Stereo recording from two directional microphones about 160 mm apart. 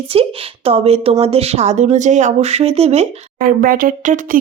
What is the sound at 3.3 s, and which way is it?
Speech, 60° right (ahead or behind).